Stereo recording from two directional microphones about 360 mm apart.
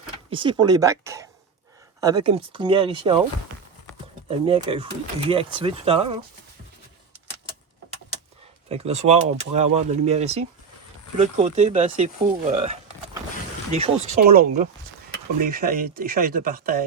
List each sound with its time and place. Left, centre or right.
0.3 s speech: centre
4.3 s speech: centre
8.7 s speech: centre
13.7 s speech: centre